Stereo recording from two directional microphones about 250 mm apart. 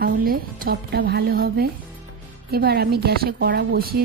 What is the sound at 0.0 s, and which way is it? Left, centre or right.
A woman's voice, right.